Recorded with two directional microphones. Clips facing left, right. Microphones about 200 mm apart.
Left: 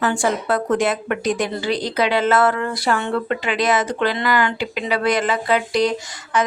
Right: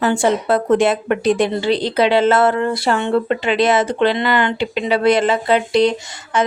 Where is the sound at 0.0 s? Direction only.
25° right (ahead or behind).